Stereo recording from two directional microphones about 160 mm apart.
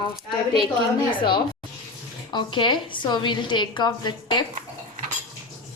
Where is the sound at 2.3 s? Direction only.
30° left (ahead or behind).